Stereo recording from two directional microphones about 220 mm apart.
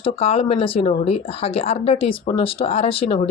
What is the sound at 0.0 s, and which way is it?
Speech, 25° left (ahead or behind).